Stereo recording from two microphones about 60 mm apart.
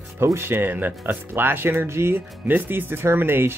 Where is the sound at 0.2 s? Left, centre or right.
Right.